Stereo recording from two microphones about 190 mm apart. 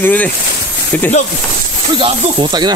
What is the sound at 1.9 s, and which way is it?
Speech, 25° right (ahead or behind).